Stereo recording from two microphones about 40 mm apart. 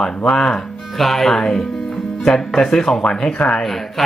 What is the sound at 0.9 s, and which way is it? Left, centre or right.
Speech, centre.